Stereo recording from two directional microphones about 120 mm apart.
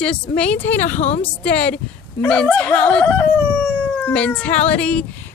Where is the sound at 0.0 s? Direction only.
10° left (ahead or behind).